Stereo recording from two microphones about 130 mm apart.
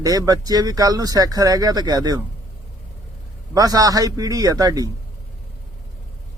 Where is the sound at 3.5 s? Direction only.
30° right (ahead or behind).